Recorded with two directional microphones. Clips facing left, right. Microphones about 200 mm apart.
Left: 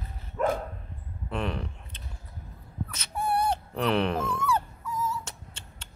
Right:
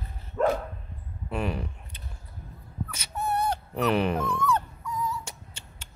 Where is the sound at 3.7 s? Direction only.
5° right (ahead or behind).